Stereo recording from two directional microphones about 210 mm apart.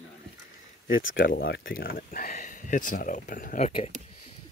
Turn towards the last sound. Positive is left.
turn(degrees=35)  # may be behind; listen again after turning